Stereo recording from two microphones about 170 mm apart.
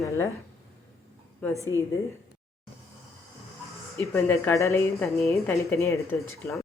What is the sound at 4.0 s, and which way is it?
A woman's voice, 15° left (ahead or behind).